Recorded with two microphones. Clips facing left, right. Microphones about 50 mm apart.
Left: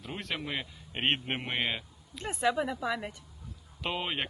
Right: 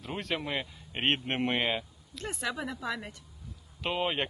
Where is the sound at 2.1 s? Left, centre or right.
Left.